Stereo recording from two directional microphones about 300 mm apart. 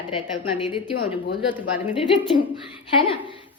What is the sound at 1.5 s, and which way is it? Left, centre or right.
Speech, centre.